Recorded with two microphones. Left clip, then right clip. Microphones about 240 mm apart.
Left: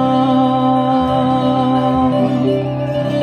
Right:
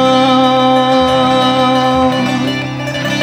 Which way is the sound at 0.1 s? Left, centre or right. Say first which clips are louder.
Right 4 dB; right.